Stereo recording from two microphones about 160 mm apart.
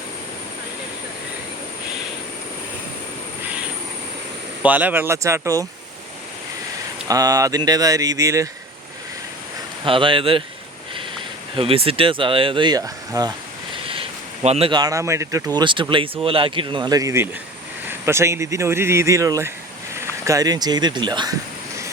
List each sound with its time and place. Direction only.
4.6 s speech: 10° right (ahead or behind)
7.1 s speech: 20° right (ahead or behind)
9.8 s speech: 30° right (ahead or behind)
11.5 s speech: 35° right (ahead or behind)
13.8 s a sound: 35° right (ahead or behind)
14.7 s speech: 25° right (ahead or behind)